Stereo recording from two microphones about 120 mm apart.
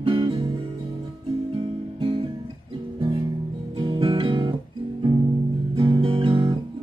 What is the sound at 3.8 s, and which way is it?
Music, 50° right (ahead or behind).